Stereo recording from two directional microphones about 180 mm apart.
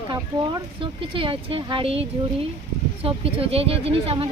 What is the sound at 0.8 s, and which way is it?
Speech, 30° right (ahead or behind).